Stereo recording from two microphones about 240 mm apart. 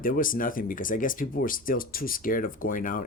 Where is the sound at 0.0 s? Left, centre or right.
Left.